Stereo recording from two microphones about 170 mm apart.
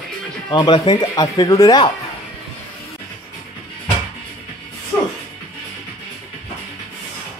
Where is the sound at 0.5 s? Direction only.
25° left (ahead or behind).